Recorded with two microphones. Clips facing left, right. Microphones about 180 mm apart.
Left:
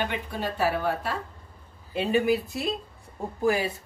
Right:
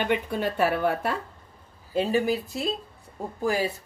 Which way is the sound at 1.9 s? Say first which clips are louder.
Even; 35° right (ahead or behind).